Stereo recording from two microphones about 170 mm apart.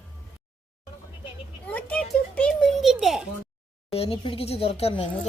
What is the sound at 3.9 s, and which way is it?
A woman's voice, 35° left (ahead or behind).